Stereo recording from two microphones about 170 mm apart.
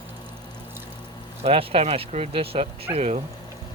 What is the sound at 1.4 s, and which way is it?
Speech, 35° right (ahead or behind).